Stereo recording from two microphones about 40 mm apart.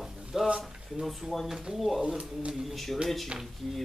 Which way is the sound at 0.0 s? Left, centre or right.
Centre.